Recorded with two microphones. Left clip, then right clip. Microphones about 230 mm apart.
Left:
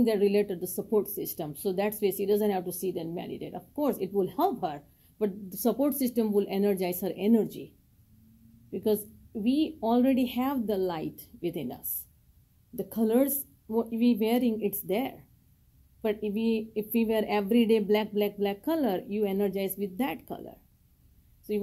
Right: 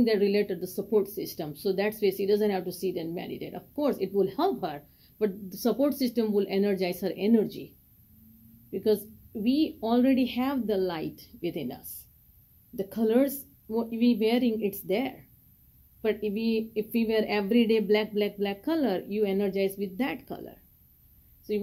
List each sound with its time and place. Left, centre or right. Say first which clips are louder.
0.0 s speech: even; centre
8.6 s speech: right 2 dB; centre